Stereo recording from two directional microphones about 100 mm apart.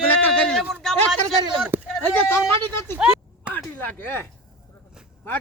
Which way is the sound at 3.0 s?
10° right (ahead or behind).